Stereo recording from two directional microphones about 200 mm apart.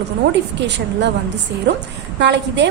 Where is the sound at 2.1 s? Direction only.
60° right (ahead or behind).